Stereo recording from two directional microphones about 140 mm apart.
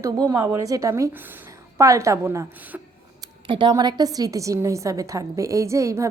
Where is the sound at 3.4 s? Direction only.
35° right (ahead or behind).